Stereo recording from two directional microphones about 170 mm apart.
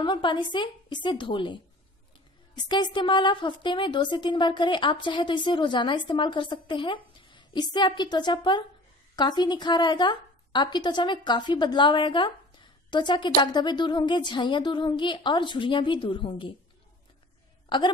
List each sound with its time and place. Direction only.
0.0 s a woman's voice: 30° left (ahead or behind)
17.6 s a woman's voice: 25° left (ahead or behind)